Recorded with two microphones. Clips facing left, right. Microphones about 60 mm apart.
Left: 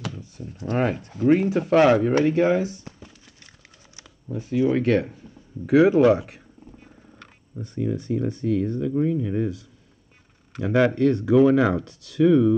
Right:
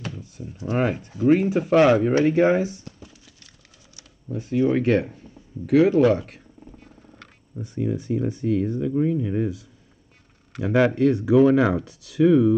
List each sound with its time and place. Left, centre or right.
0.7 s speech: centre
2.2 s speech: right
4.3 s speech: centre
5.7 s speech: centre
7.6 s speech: centre
10.6 s speech: centre